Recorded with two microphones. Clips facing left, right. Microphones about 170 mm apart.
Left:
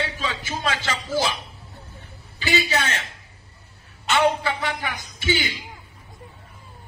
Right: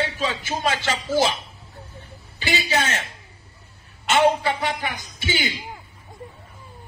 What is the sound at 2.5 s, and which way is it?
Speech, 40° right (ahead or behind).